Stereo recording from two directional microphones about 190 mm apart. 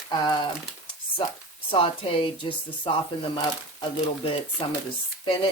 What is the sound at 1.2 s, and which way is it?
Speech, 25° left (ahead or behind).